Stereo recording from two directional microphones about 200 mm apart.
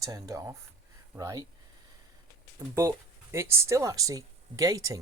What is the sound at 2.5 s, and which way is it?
Speech, 15° right (ahead or behind).